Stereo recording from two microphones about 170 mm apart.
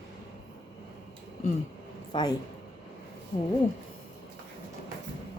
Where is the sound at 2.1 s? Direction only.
25° left (ahead or behind).